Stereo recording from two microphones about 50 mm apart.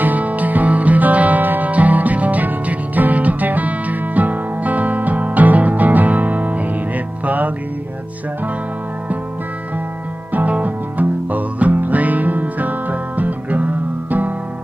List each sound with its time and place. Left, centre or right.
0.0 s music: right
10.3 s music: right